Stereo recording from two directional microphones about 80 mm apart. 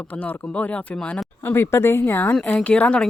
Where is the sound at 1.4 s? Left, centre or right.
Left; by 3.0 s centre.